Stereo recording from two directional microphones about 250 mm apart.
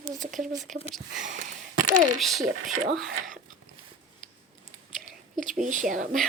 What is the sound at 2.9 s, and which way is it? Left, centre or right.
Speech, centre.